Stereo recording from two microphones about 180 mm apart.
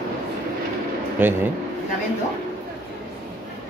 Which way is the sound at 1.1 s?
10° right (ahead or behind).